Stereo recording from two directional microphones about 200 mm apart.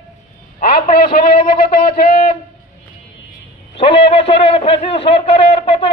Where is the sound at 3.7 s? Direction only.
30° left (ahead or behind).